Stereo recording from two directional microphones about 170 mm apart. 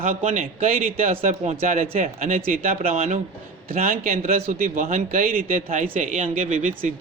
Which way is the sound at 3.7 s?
55° right (ahead or behind).